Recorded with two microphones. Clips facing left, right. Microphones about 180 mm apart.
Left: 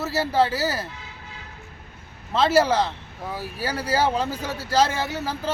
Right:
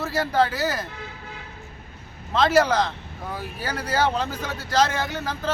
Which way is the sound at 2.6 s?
10° left (ahead or behind).